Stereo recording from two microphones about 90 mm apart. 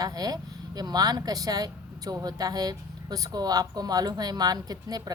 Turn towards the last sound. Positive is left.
turn(degrees=-45)  # may be behind; listen again after turning